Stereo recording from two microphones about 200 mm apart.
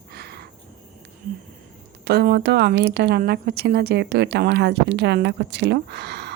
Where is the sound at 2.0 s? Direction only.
55° right (ahead or behind).